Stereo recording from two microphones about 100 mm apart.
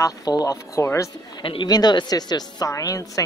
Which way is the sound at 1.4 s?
50° left (ahead or behind).